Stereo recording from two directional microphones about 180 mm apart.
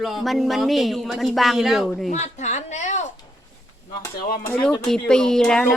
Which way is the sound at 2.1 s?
40° left (ahead or behind).